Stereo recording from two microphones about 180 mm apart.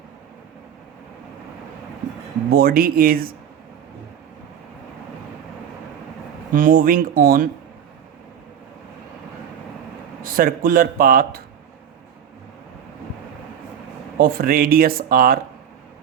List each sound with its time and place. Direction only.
2.5 s speech: 55° right (ahead or behind)
6.5 s speech: 50° right (ahead or behind)
10.2 s speech: 55° right (ahead or behind)
14.2 s speech: 55° right (ahead or behind)